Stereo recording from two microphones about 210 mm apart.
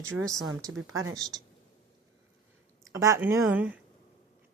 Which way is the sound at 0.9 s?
70° right (ahead or behind).